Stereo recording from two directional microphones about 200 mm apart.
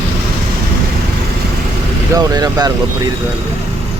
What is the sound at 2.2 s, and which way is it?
Vehicle, 20° right (ahead or behind).